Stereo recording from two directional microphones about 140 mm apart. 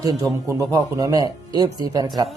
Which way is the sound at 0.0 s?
25° right (ahead or behind).